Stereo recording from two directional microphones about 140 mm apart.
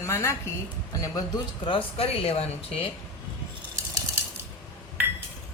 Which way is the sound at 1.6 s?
40° left (ahead or behind).